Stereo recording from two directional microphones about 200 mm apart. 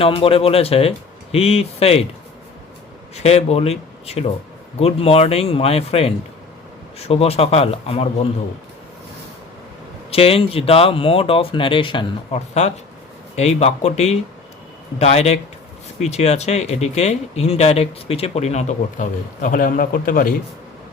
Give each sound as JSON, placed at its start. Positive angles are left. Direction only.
{"t": 0.0, "sound": "speech", "side_deg": 30}
{"t": 3.2, "sound": "speech", "side_deg": 30}
{"t": 10.1, "sound": "speech", "side_deg": 30}